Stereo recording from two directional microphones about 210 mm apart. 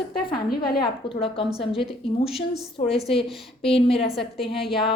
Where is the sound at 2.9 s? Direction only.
25° left (ahead or behind).